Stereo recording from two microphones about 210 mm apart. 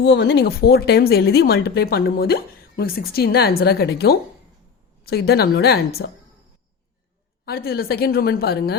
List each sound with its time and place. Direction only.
0.0 s speech: 55° left (ahead or behind)
7.4 s speech: 45° left (ahead or behind)